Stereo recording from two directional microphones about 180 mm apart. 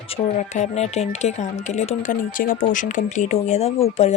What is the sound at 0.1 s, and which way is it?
Speech, 35° left (ahead or behind).